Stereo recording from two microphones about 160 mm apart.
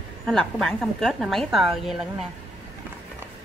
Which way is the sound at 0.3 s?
Centre (ahead or behind).